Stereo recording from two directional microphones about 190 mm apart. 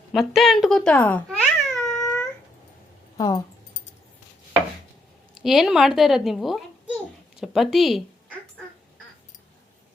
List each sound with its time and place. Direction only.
0.1 s a woman's voice: centre (ahead or behind)
1.6 s cat: centre (ahead or behind)
1.9 s a sound: 15° left (ahead or behind)
3.2 s speech: 20° left (ahead or behind)
5.3 s a child's voice: centre (ahead or behind)